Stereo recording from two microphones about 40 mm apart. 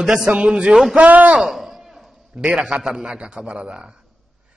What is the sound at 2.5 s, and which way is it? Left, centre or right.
A man's voice, centre.